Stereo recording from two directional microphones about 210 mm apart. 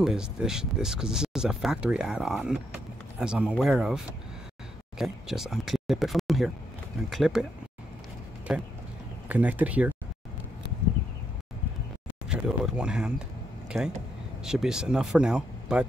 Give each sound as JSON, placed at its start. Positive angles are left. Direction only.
{"t": 0.0, "sound": "speech", "side_deg": -5}
{"t": 8.5, "sound": "speech", "side_deg": -5}
{"t": 12.3, "sound": "speech", "side_deg": -5}